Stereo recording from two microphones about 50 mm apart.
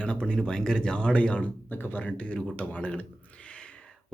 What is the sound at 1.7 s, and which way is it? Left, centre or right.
Speech, left.